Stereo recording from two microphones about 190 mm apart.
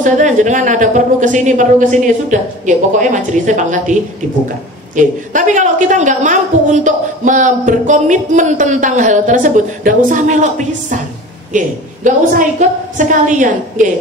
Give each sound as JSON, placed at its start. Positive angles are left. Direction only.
{"t": 0.0, "sound": "a woman's voice", "side_deg": -40}
{"t": 4.9, "sound": "a woman's voice", "side_deg": -40}